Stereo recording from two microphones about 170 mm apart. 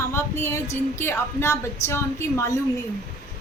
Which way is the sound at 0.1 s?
15° left (ahead or behind).